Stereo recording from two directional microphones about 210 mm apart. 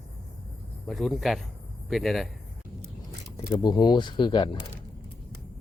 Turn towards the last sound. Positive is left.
turn(degrees=25)  # may be behind; listen again after turning